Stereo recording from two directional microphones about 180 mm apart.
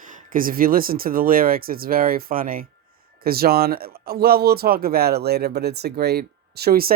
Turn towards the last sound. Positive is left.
turn(degrees=-55)  # may be behind; listen again after turning